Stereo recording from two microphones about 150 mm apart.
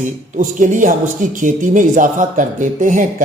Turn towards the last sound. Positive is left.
turn(degrees=-60)  # may be behind; listen again after turning